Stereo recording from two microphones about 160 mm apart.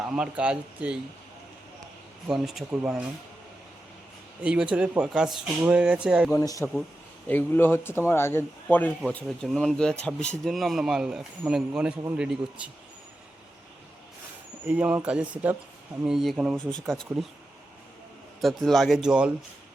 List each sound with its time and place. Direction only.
0.0 s speech: 5° right (ahead or behind)
2.2 s speech: 5° right (ahead or behind)
4.4 s speech: 5° right (ahead or behind)
6.3 s speech: 20° left (ahead or behind); by 12.7 s 5° right (ahead or behind)
14.7 s speech: 10° right (ahead or behind)
18.3 s speech: centre (ahead or behind)